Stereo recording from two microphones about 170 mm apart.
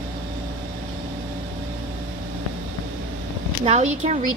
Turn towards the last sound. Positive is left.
turn(degrees=-40)  # may be behind; listen again after turning